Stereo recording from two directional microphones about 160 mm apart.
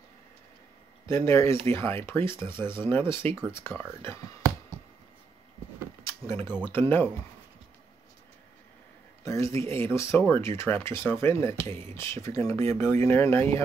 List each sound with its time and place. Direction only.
1.0 s speech: 15° left (ahead or behind)
6.0 s a sound: 15° left (ahead or behind)
6.7 s speech: 15° left (ahead or behind)
9.2 s speech: 20° left (ahead or behind)